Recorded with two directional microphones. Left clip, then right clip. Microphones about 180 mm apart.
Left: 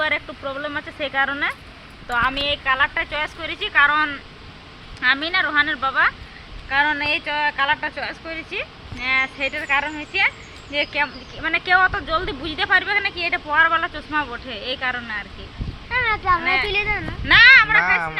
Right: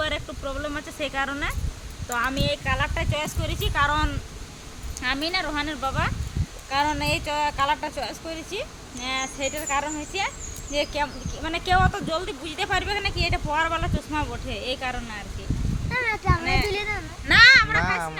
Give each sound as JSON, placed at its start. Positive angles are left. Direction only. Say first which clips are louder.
{"t": 0.0, "sound": "speech", "louder": "left 6 dB", "side_deg": 5}
{"t": 2.0, "sound": "speech", "louder": "left 5 dB", "side_deg": -15}
{"t": 2.7, "sound": "speech", "louder": "left 6 dB", "side_deg": -10}
{"t": 15.9, "sound": "speech", "louder": "left 6 dB", "side_deg": -20}